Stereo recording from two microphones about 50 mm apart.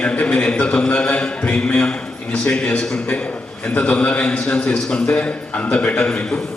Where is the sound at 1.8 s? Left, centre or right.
Left.